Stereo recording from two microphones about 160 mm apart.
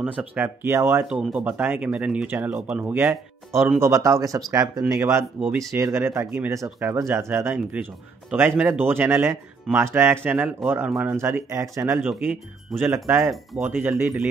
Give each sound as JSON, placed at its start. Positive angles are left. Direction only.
{"t": 0.0, "sound": "speech", "side_deg": -10}
{"t": 9.7, "sound": "speech", "side_deg": -5}
{"t": 11.1, "sound": "speech", "side_deg": -15}